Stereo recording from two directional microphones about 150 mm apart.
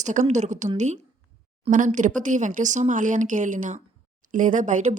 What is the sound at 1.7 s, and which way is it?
A woman's voice, 60° right (ahead or behind).